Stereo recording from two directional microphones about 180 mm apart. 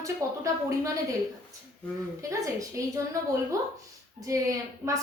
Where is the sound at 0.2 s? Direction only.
15° right (ahead or behind).